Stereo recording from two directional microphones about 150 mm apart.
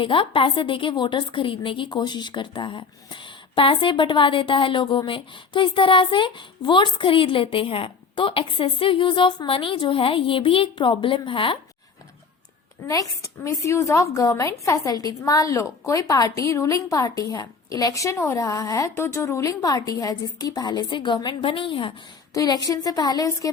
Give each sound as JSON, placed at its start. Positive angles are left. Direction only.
{"t": 0.0, "sound": "a woman's voice", "side_deg": 35}
{"t": 12.9, "sound": "a woman's voice", "side_deg": 20}